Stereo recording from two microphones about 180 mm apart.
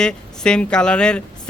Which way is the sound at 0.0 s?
5° left (ahead or behind).